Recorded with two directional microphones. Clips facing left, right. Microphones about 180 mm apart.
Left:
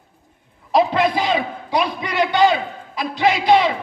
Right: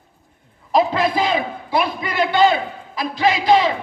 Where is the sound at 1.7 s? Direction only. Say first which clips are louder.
Even; 20° left (ahead or behind).